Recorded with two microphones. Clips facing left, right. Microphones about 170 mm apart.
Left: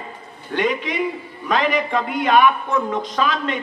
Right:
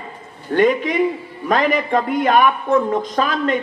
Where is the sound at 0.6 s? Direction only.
45° right (ahead or behind).